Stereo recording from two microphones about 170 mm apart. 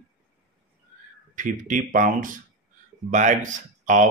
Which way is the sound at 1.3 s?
50° right (ahead or behind).